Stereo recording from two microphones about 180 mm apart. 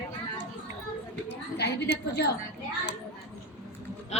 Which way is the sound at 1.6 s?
70° left (ahead or behind).